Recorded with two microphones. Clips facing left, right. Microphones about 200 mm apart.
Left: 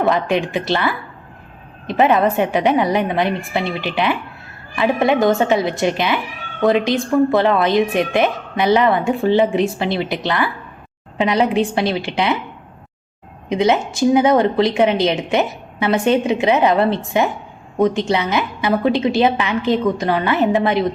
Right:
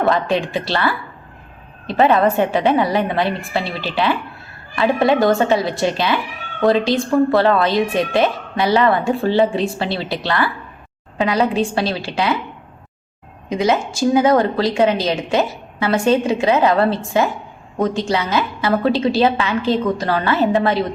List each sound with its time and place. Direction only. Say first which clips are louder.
0.1 s a woman's voice: even; 15° left (ahead or behind)
13.5 s a woman's voice: left 1 dB; 20° left (ahead or behind)